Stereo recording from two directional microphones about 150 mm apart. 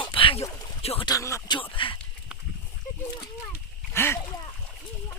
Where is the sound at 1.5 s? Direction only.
35° left (ahead or behind).